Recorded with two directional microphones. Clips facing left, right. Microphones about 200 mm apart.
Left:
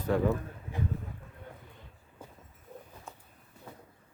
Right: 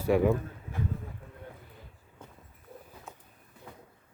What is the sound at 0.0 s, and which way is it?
Speech, 10° right (ahead or behind).